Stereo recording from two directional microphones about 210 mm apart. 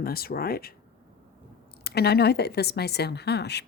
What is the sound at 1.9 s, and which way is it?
Speech, 50° left (ahead or behind).